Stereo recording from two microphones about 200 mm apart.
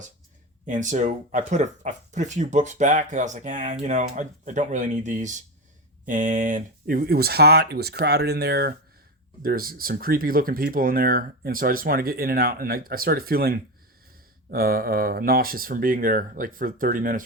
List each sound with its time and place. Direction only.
0.6 s speech: 40° right (ahead or behind)